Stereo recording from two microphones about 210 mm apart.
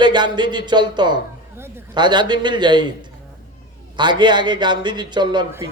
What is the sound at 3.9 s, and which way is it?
Speech, 20° right (ahead or behind).